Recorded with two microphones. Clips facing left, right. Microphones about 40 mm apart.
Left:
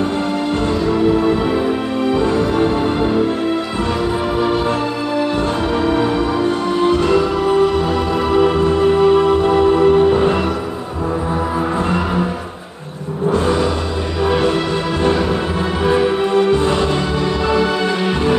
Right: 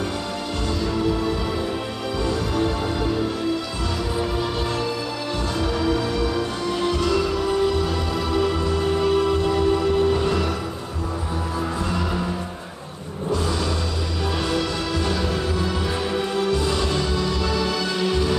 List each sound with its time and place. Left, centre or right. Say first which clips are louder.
6.3 s music: left 8 dB; left
13.3 s vehicle: left 8 dB; left
14.2 s music: left 11 dB; left
15.8 s music: left 9 dB; left